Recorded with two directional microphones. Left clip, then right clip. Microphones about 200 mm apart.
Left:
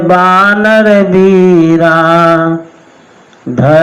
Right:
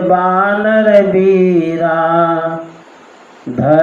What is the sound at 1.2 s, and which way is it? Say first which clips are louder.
Speech: left 5 dB; 45° left (ahead or behind).